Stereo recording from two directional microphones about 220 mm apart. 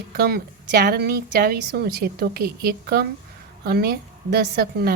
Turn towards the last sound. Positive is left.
turn(degrees=-45)  # may be behind; listen again after turning